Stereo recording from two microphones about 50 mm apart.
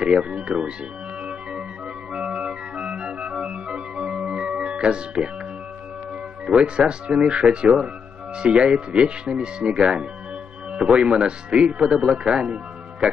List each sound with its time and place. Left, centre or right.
0.0 s speech: right
2.1 s organ: centre
6.4 s speech: right